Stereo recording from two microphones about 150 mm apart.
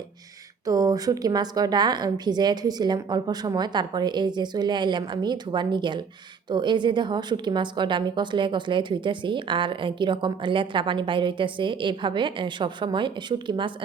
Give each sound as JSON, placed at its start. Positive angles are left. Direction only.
{"t": 0.6, "sound": "a woman's voice", "side_deg": -25}